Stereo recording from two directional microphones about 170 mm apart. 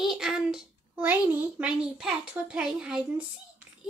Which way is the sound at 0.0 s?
Centre (ahead or behind).